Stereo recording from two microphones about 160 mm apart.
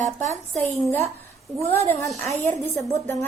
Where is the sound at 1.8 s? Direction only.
15° left (ahead or behind).